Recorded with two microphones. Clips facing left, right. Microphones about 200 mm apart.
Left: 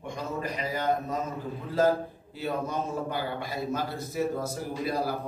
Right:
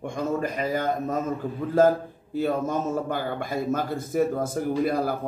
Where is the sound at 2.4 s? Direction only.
50° right (ahead or behind).